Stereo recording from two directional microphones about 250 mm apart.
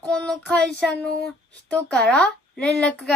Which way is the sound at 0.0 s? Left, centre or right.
Centre.